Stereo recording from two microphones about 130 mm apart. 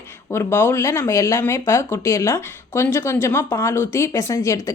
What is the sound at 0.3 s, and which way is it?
Speech, 20° left (ahead or behind).